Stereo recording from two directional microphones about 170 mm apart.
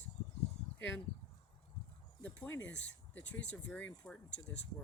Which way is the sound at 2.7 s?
90° left.